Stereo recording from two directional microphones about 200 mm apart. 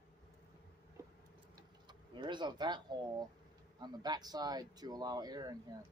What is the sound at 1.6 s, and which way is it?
Speech, 20° right (ahead or behind).